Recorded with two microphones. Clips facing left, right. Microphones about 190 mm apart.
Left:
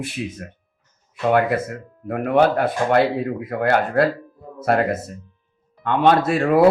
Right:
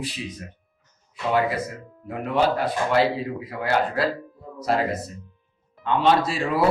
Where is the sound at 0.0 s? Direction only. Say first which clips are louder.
Left 4 dB; 55° left (ahead or behind).